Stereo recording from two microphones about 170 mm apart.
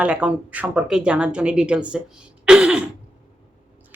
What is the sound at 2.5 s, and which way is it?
Throat clearing, 5° right (ahead or behind).